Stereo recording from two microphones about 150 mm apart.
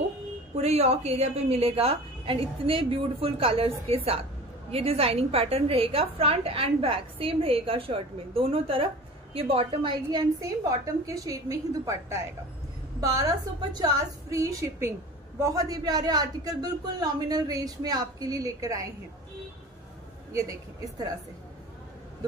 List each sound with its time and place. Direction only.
0.6 s a woman's voice: 45° right (ahead or behind)
10.4 s speech: 20° right (ahead or behind)